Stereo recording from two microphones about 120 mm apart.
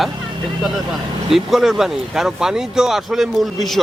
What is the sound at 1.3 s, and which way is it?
Speech, centre (ahead or behind).